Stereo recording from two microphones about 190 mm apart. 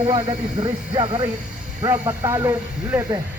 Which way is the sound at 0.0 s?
25° right (ahead or behind).